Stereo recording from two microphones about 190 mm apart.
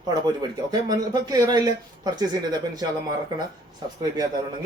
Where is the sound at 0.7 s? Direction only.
20° right (ahead or behind).